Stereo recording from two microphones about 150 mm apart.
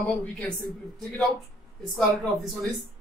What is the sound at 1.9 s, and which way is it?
Speech, centre (ahead or behind).